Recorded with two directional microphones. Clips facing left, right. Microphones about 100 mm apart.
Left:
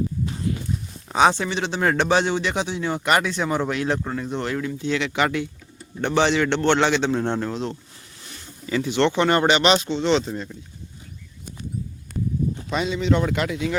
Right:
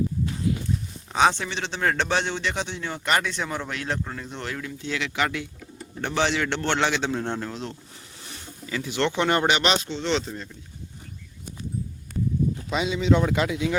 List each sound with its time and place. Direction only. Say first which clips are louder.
1.1 s a man's voice: left 3 dB; 5° left (ahead or behind)
8.7 s speech: left 5 dB; 5° right (ahead or behind)
12.7 s speech: even; 5° right (ahead or behind)